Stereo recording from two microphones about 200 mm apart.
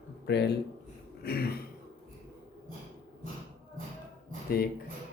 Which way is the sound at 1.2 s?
50° left (ahead or behind).